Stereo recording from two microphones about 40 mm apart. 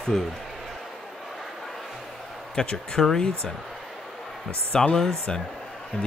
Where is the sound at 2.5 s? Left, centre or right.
Centre.